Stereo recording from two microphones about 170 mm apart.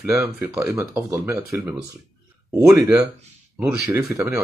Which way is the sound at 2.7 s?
20° right (ahead or behind).